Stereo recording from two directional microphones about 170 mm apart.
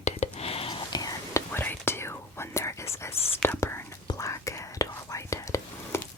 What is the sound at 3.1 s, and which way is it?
Whispering, 35° left (ahead or behind).